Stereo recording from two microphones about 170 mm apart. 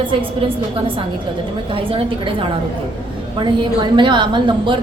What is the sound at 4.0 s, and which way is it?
Speech, 30° right (ahead or behind).